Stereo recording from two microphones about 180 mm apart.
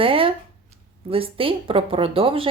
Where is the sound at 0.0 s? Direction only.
30° right (ahead or behind).